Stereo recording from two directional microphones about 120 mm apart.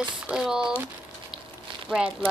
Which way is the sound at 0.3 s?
5° right (ahead or behind).